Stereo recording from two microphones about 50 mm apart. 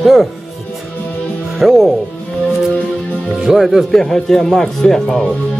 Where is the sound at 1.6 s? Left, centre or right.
Centre.